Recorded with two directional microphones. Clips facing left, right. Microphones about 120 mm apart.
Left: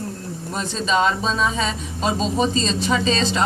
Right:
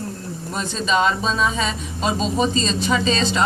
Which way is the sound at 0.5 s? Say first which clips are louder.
Even; 35° left (ahead or behind).